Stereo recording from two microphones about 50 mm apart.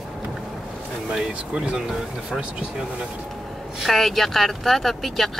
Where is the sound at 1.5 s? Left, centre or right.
Centre.